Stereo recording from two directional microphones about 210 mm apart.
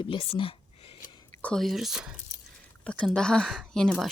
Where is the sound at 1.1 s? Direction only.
20° left (ahead or behind).